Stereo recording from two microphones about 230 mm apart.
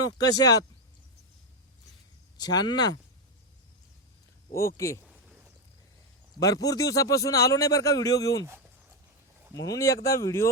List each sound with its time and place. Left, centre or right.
0.0 s a man's voice: centre
2.4 s a man's voice: centre
4.5 s a man's voice: centre
5.0 s a sound: centre
6.4 s a man's voice: centre
9.6 s a man's voice: centre